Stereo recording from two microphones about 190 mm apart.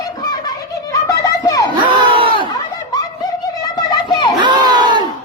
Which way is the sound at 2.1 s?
25° right (ahead or behind).